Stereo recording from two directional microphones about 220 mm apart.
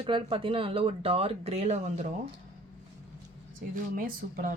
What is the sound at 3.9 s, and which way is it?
Speech, 40° right (ahead or behind).